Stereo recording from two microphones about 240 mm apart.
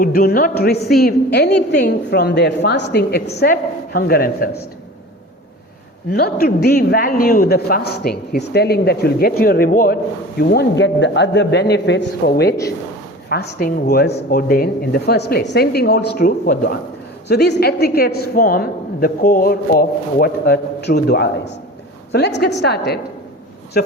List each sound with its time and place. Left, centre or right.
0.0 s a woman's voice: left
6.1 s a woman's voice: left
14.1 s speech: left
14.3 s a woman's voice: left
22.4 s a woman's voice: left